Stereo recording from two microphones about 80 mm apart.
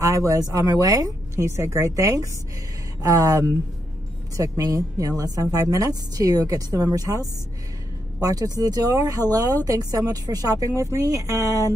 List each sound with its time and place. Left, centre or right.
0.0 s speech: right
1.3 s a woman's voice: right